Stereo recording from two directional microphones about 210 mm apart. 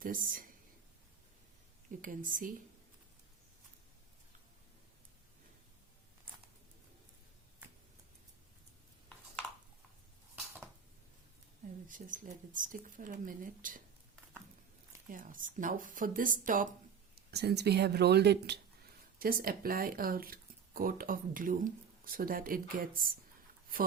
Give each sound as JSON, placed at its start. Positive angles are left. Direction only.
{"t": 0.0, "sound": "speech", "side_deg": -40}
{"t": 2.0, "sound": "speech", "side_deg": -40}
{"t": 11.9, "sound": "speech", "side_deg": -40}
{"t": 15.1, "sound": "speech", "side_deg": -40}
{"t": 17.3, "sound": "speech", "side_deg": -50}